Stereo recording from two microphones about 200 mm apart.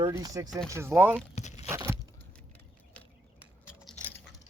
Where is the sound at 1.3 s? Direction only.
35° left (ahead or behind).